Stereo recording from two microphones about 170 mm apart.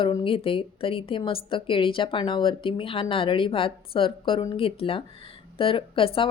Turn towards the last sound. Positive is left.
turn(degrees=30)  # may be behind; listen again after turning